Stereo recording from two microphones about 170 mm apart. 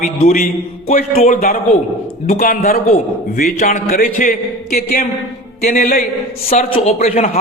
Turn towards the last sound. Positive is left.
turn(degrees=40)  # may be behind; listen again after turning